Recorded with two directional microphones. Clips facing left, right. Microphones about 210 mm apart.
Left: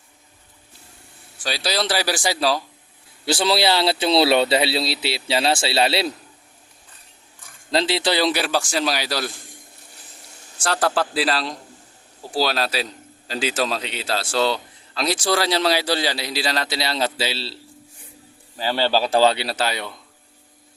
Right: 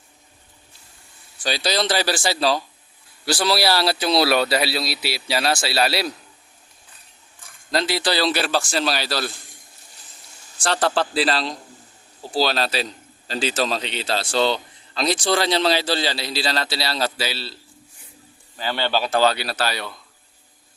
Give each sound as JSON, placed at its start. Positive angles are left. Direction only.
{"t": 1.5, "sound": "a man's voice", "side_deg": 5}
{"t": 3.2, "sound": "speech", "side_deg": 25}
{"t": 7.7, "sound": "a man's voice", "side_deg": 25}
{"t": 10.6, "sound": "a man's voice", "side_deg": 5}